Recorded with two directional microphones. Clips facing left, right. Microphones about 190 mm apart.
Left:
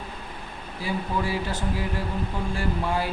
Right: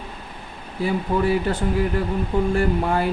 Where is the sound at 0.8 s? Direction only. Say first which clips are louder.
Right 7 dB; 60° right (ahead or behind).